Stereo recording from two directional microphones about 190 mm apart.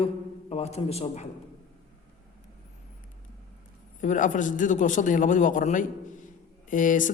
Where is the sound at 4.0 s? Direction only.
40° left (ahead or behind).